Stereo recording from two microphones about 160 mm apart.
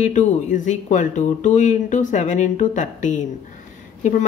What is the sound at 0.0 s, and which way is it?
Speech, 50° left (ahead or behind).